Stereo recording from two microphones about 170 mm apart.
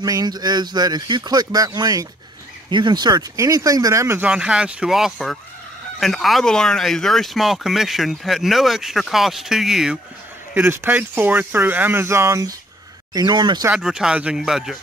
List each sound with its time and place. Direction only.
0.0 s speech: 25° right (ahead or behind); by 9.9 s centre (ahead or behind)
10.5 s speech: 10° right (ahead or behind)
13.7 s speech: 5° right (ahead or behind)